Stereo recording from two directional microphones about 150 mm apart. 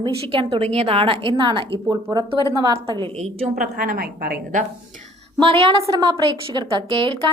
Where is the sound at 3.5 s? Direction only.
70° right (ahead or behind); by 4.6 s 90° right.